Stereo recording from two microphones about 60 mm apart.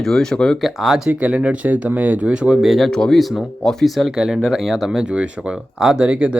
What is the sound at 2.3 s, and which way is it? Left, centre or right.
Speech, centre.